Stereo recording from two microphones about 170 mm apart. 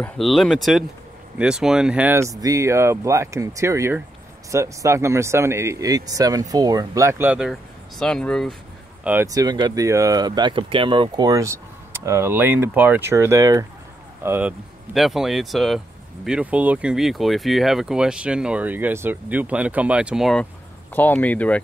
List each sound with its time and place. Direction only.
0.0 s speech: centre (ahead or behind)
8.0 s speech: 5° left (ahead or behind)
9.0 s speech: 15° right (ahead or behind)
15.0 s speech: centre (ahead or behind)
20.9 s speech: 10° left (ahead or behind)